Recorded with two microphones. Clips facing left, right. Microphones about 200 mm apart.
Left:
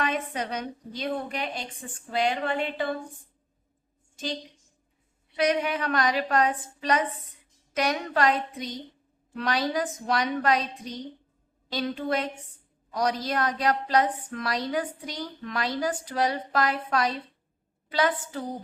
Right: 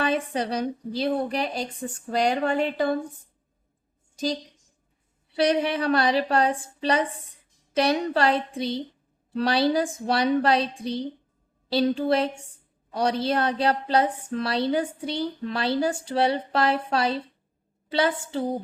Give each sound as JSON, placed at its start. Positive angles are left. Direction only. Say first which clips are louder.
{"t": 0.0, "sound": "a woman's voice", "louder": "right 4 dB", "side_deg": -35}
{"t": 5.3, "sound": "a woman's voice", "louder": "right 3 dB", "side_deg": -30}